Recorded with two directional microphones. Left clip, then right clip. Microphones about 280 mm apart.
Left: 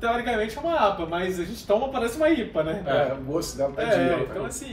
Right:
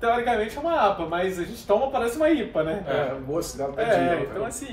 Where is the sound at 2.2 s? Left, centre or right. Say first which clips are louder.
Left 1 dB; centre.